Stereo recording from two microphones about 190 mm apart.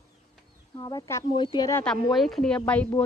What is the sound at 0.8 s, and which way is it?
A child's voice, 20° left (ahead or behind).